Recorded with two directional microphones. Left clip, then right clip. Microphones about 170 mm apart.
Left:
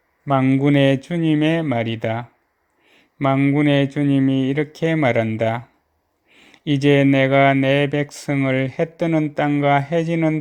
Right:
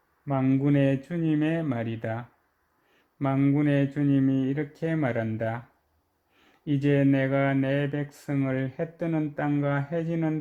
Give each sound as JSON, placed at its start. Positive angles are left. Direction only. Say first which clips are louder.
{"t": 0.4, "sound": "speech", "louder": "left 7 dB", "side_deg": 25}
{"t": 6.3, "sound": "a sound", "louder": "left 8 dB", "side_deg": 15}
{"t": 6.8, "sound": "speech", "louder": "left 9 dB", "side_deg": 25}